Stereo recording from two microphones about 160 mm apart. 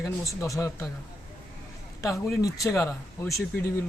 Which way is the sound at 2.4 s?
20° left (ahead or behind).